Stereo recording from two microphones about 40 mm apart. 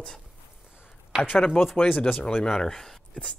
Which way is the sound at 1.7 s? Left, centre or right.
Left.